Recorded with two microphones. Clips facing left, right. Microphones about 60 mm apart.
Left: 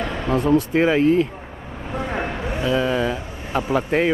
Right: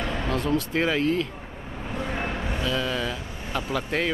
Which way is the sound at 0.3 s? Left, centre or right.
Left.